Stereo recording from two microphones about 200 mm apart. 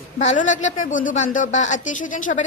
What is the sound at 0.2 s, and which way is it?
A woman's voice, 40° left (ahead or behind).